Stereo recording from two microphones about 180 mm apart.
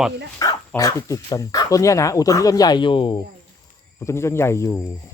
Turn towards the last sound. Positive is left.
turn(degrees=15)  # may be behind; listen again after turning